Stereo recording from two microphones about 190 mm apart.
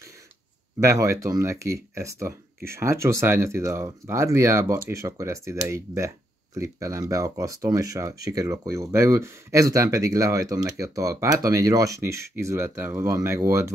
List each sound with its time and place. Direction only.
0.7 s speech: 15° right (ahead or behind)